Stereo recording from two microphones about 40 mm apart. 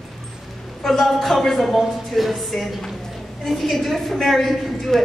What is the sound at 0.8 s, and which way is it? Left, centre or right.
Speech, centre.